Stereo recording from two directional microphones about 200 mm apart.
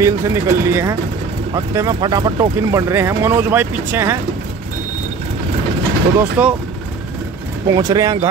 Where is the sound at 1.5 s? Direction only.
20° right (ahead or behind).